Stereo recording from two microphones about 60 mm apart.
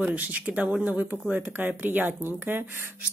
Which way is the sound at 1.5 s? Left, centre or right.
Right.